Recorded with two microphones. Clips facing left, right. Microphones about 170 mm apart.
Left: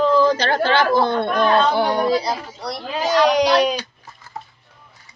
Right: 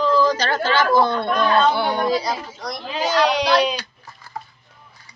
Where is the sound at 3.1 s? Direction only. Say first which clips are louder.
Left 3 dB; 45° left (ahead or behind).